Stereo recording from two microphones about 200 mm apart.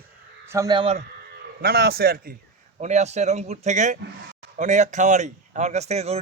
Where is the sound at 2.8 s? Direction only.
35° right (ahead or behind).